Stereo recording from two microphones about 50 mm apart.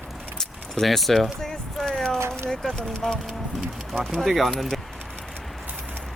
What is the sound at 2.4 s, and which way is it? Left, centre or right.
Speech, centre.